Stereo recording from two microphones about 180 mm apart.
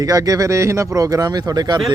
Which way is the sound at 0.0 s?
20° right (ahead or behind).